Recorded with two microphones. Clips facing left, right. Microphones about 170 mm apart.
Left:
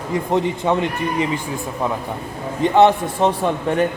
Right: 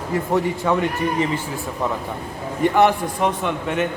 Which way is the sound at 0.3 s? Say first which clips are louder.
Left 1 dB; 20° left (ahead or behind).